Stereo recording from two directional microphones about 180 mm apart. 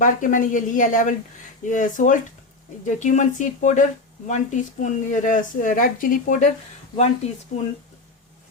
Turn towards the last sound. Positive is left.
turn(degrees=40)  # may be behind; listen again after turning